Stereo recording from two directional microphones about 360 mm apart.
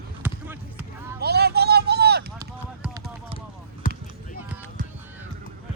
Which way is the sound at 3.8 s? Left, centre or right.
Left.